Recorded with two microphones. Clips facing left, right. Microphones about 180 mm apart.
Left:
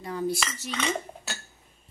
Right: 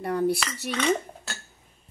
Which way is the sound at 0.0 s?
60° right (ahead or behind).